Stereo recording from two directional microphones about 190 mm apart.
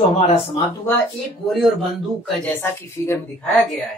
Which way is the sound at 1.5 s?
Centre (ahead or behind).